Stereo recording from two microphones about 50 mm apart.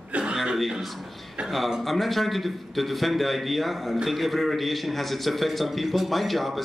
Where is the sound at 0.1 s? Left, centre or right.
Right.